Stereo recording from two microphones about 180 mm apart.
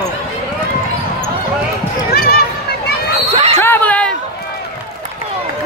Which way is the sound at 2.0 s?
60° left (ahead or behind).